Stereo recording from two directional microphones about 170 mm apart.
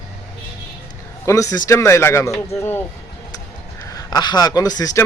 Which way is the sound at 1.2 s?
20° left (ahead or behind).